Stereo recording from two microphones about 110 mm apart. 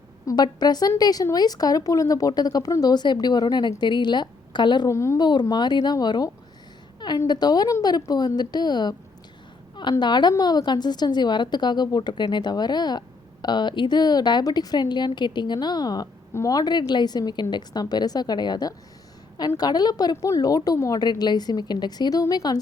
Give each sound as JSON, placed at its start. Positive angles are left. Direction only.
{"t": 0.3, "sound": "a woman's voice", "side_deg": 40}
{"t": 4.9, "sound": "a woman's voice", "side_deg": 25}
{"t": 5.2, "sound": "a woman's voice", "side_deg": 40}
{"t": 10.0, "sound": "a woman's voice", "side_deg": 40}